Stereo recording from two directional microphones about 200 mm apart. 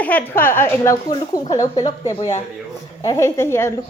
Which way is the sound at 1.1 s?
20° left (ahead or behind).